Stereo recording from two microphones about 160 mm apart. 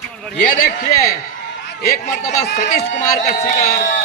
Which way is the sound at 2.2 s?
45° left (ahead or behind).